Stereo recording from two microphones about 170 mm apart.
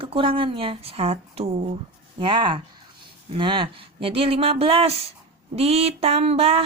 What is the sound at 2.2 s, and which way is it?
Speech, 25° right (ahead or behind).